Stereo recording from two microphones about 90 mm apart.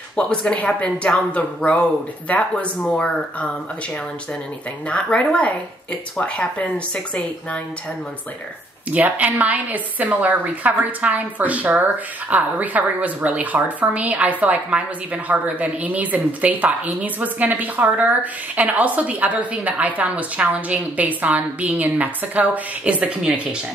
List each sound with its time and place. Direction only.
0.1 s speech: 10° left (ahead or behind)
4.8 s speech: 15° left (ahead or behind)
8.9 s speech: 15° right (ahead or behind)